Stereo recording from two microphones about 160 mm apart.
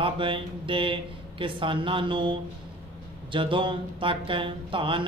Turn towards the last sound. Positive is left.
turn(degrees=-30)  # may be behind; listen again after turning